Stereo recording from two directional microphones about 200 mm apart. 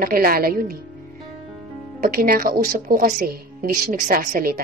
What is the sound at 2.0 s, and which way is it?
A woman's voice, 45° right (ahead or behind).